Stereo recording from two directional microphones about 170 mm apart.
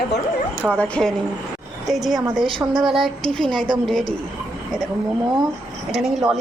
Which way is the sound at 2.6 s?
20° right (ahead or behind).